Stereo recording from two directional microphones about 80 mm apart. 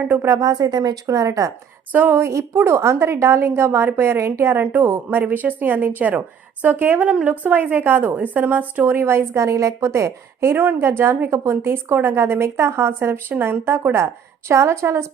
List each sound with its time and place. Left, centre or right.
0.0 s a woman's voice: right
0.3 s speech: right
1.0 s speech: right
1.9 s a woman's voice: right
2.2 s a woman's voice: right